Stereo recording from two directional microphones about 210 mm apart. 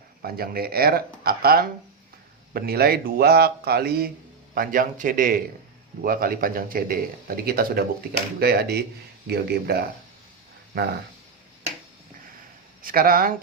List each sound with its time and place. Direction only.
0.2 s speech: 45° right (ahead or behind)
12.8 s speech: 45° right (ahead or behind)